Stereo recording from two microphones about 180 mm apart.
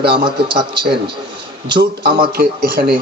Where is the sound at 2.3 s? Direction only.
55° right (ahead or behind).